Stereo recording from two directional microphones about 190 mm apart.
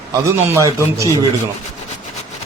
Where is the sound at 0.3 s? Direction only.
15° right (ahead or behind).